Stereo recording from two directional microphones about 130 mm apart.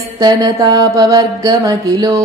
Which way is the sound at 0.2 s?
30° right (ahead or behind).